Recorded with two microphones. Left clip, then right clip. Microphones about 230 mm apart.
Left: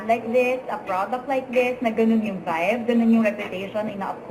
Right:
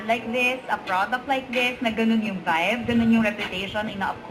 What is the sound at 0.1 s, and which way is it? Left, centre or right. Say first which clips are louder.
A woman's voice: left 3 dB; right.